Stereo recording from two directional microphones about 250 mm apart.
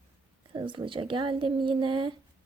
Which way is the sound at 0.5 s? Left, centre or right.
Centre.